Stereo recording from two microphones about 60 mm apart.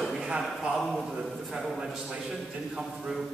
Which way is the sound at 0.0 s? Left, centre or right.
Centre.